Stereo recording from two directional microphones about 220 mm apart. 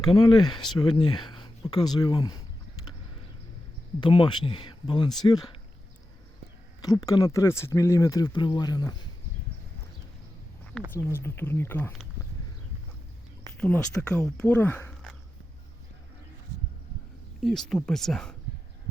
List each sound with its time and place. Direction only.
0.0 s speech: 20° left (ahead or behind)
4.0 s speech: 20° left (ahead or behind)
6.8 s speech: 15° left (ahead or behind)
10.9 s speech: 10° left (ahead or behind)
13.6 s speech: 5° left (ahead or behind)
17.4 s speech: centre (ahead or behind)